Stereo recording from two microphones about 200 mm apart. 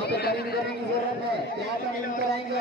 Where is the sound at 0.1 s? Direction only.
50° left (ahead or behind).